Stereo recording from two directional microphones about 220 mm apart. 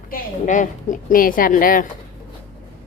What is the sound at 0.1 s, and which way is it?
A woman's voice, 35° left (ahead or behind).